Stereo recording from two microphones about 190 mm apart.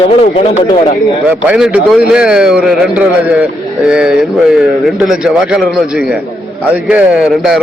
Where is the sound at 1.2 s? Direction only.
5° right (ahead or behind).